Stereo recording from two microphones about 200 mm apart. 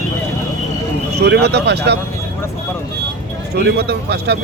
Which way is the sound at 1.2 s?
60° right (ahead or behind).